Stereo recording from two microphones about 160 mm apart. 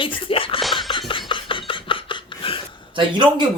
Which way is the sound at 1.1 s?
30° left (ahead or behind).